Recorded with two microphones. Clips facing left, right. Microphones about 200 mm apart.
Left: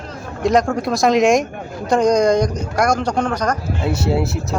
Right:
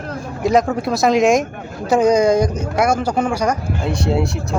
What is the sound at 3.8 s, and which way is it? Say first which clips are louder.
Speech: even; 5° left (ahead or behind).